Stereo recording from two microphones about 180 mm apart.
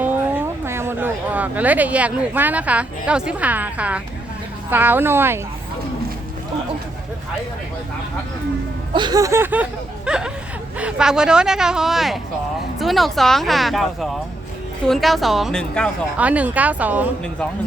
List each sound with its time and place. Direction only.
0.0 s speech: 10° right (ahead or behind)
8.9 s speech: 25° right (ahead or behind); by 15.9 s 5° left (ahead or behind)
16.1 s speech: 10° right (ahead or behind)